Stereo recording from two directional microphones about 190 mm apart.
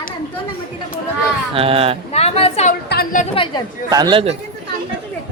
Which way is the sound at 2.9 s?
50° left (ahead or behind).